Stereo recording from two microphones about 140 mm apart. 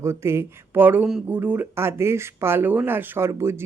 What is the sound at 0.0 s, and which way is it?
Speech, 20° right (ahead or behind).